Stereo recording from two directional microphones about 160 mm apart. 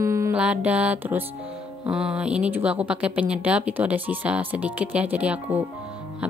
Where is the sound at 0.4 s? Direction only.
5° right (ahead or behind).